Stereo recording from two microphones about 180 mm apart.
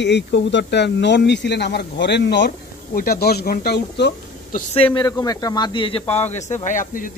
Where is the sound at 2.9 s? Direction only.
55° left (ahead or behind).